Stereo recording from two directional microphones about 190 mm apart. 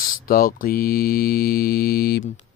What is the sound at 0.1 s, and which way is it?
Mantra, 50° left (ahead or behind).